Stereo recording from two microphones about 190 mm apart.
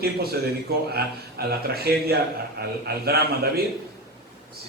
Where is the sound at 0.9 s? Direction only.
55° right (ahead or behind).